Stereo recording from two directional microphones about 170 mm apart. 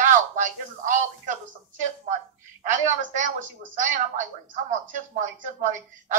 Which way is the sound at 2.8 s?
45° right (ahead or behind).